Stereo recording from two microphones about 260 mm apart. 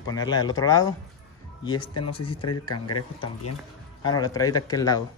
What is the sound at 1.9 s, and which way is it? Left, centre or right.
Speech, left.